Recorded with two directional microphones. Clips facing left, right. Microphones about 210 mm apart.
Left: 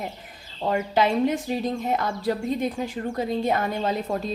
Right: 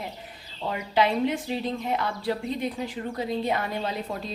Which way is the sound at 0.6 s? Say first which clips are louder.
Left 3 dB; 45° left (ahead or behind).